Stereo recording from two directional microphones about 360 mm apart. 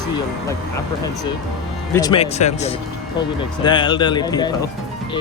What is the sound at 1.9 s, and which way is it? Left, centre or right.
Speech, centre.